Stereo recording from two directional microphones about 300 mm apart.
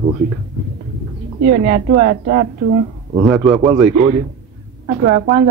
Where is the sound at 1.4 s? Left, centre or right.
Right.